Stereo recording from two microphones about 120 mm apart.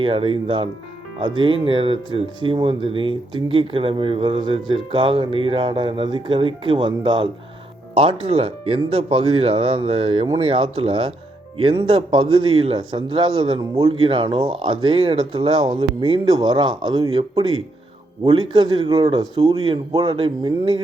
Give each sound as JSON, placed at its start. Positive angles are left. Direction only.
{"t": 0.0, "sound": "a man's voice", "side_deg": -45}
{"t": 18.3, "sound": "speech", "side_deg": -40}
{"t": 20.0, "sound": "a man's voice", "side_deg": -45}